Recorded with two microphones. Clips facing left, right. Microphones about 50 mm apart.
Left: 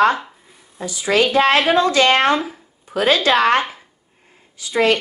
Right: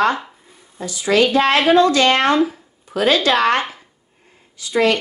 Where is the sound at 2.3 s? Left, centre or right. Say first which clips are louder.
Right 4 dB; centre.